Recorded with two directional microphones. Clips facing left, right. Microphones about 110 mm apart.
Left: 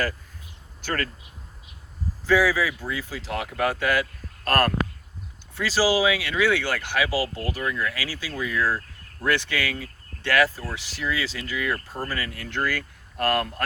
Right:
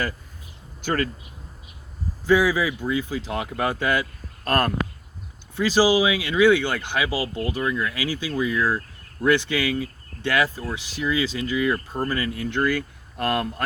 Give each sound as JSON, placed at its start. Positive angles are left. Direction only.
{"t": 0.8, "sound": "speech", "side_deg": -15}
{"t": 2.2, "sound": "speech", "side_deg": -20}